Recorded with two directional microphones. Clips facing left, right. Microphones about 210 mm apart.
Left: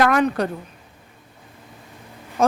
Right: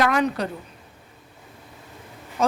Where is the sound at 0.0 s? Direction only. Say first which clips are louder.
Left 3 dB; 50° left (ahead or behind).